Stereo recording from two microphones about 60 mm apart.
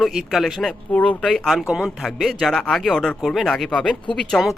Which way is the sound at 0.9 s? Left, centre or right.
Left.